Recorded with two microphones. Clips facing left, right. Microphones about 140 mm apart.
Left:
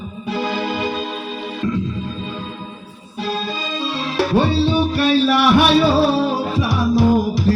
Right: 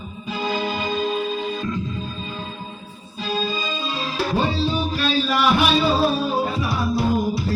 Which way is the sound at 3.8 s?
75° left (ahead or behind).